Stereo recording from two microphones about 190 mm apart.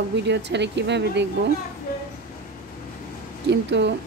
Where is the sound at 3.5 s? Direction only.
65° right (ahead or behind).